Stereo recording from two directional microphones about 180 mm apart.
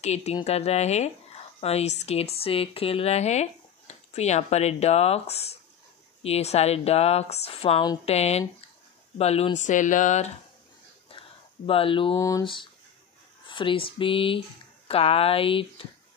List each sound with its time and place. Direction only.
0.0 s speech: 35° left (ahead or behind)
11.6 s speech: 30° left (ahead or behind)